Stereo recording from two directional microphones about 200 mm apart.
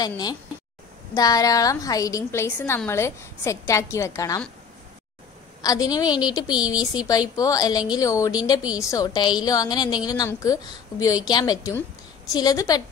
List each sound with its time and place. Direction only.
0.0 s a woman's voice: 20° left (ahead or behind)
5.6 s a woman's voice: 20° left (ahead or behind)